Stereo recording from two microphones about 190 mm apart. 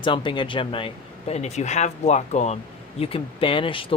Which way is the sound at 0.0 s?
25° left (ahead or behind).